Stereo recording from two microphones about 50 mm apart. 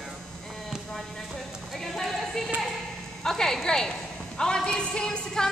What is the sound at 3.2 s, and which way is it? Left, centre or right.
A woman's voice, centre.